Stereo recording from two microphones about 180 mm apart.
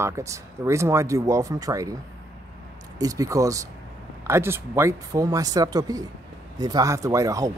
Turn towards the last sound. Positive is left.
turn(degrees=-15)  # may be behind; listen again after turning